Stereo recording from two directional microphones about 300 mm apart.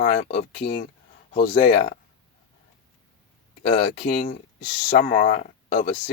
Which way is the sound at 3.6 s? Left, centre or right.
Centre.